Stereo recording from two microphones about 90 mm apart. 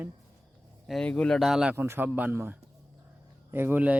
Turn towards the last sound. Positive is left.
turn(degrees=-20)  # may be behind; listen again after turning